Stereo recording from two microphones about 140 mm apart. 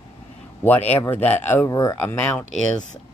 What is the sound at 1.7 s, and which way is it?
Speech, 25° left (ahead or behind).